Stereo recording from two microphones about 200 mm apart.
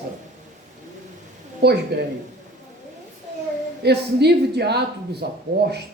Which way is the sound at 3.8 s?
55° right (ahead or behind).